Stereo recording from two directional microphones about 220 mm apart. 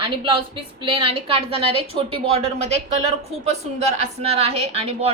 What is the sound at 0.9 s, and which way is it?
A woman's voice, 25° right (ahead or behind).